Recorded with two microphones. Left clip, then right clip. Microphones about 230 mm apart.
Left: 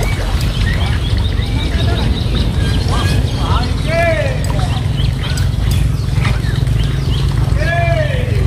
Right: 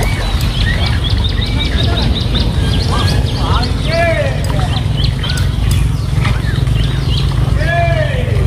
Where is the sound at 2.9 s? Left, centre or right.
Left.